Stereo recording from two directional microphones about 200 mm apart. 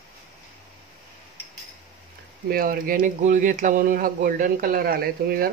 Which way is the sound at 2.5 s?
45° right (ahead or behind).